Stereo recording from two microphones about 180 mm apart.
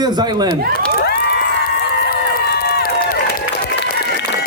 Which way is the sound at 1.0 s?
65° left (ahead or behind).